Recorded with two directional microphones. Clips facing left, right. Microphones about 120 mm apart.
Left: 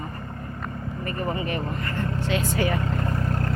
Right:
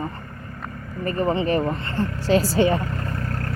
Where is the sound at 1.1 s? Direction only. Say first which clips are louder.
Right 7 dB; 30° right (ahead or behind).